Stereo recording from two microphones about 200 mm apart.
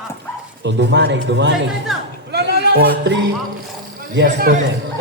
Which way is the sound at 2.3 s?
55° right (ahead or behind).